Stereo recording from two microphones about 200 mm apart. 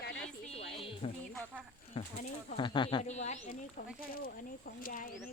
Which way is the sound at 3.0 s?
35° left (ahead or behind).